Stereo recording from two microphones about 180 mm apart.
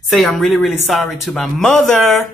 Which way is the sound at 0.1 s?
Centre (ahead or behind).